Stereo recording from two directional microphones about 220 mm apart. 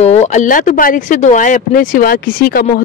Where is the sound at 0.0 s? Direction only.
30° left (ahead or behind).